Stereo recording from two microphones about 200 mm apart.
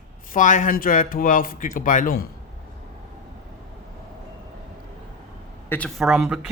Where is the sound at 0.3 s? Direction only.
40° left (ahead or behind).